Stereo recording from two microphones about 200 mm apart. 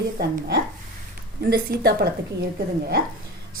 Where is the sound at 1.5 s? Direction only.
50° right (ahead or behind).